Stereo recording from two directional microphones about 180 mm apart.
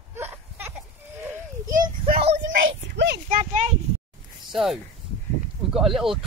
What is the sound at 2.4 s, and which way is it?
Speech, 80° right.